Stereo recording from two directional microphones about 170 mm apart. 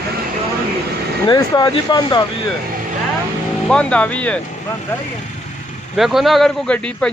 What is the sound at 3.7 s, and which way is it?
Speech, 5° left (ahead or behind).